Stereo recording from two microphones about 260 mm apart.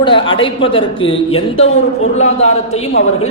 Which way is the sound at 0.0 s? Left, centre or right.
Centre.